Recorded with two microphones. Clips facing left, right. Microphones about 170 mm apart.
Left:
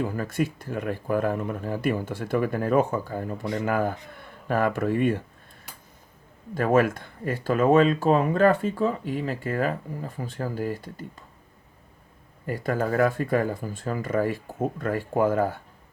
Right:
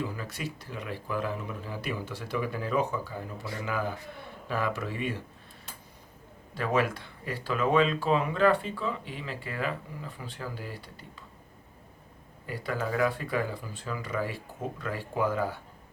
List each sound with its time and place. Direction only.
0.0 s speech: 50° left (ahead or behind)
6.5 s speech: 50° left (ahead or behind)
12.5 s speech: 45° left (ahead or behind)